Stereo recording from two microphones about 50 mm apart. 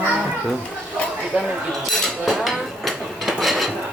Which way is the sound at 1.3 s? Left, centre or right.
Right.